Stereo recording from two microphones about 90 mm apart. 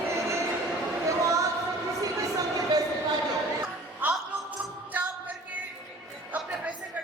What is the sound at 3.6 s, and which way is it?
Music, 15° right (ahead or behind).